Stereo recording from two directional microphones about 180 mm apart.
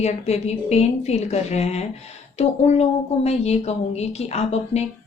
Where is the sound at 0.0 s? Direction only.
35° left (ahead or behind).